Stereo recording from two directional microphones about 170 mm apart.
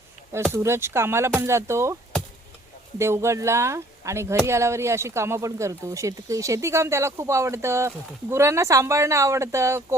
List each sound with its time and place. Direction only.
0.5 s speech: 15° right (ahead or behind)
3.0 s speech: 15° right (ahead or behind)